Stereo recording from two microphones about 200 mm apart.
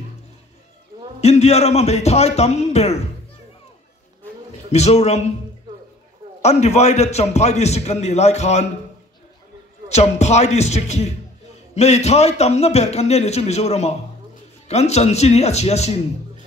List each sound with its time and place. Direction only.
1.2 s a man's voice: 30° left (ahead or behind)
4.7 s a man's voice: 35° left (ahead or behind)
6.4 s a man's voice: 35° left (ahead or behind)
9.8 s a man's voice: 35° left (ahead or behind)